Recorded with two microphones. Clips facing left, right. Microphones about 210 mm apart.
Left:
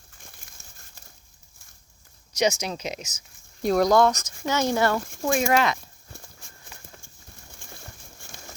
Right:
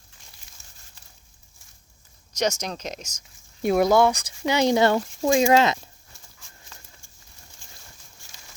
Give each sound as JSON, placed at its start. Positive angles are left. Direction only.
{"t": 0.2, "sound": "a sound", "side_deg": 55}
{"t": 2.4, "sound": "speech", "side_deg": 10}
{"t": 3.6, "sound": "speech", "side_deg": -5}
{"t": 6.1, "sound": "clip-clop", "side_deg": 55}
{"t": 6.7, "sound": "clip-clop", "side_deg": 15}
{"t": 7.7, "sound": "a sound", "side_deg": 55}